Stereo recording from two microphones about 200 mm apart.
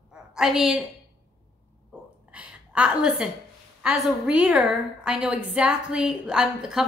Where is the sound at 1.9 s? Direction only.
5° right (ahead or behind).